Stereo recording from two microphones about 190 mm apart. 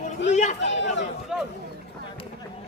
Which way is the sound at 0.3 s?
40° left (ahead or behind).